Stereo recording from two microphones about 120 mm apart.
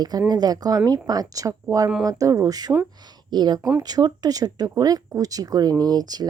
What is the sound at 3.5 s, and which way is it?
Speech, 20° right (ahead or behind).